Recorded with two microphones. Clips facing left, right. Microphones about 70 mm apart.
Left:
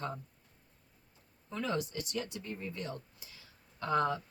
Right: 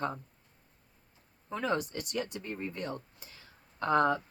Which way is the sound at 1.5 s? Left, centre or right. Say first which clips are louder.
Right 3 dB; right.